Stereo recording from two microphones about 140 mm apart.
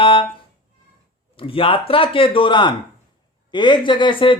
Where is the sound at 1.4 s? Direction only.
40° left (ahead or behind).